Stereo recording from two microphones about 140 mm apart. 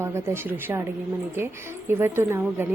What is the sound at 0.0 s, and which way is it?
Speech, 20° right (ahead or behind).